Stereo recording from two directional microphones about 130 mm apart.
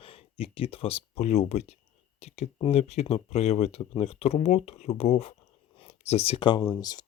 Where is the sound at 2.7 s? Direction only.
55° left (ahead or behind); by 7.1 s 30° left (ahead or behind).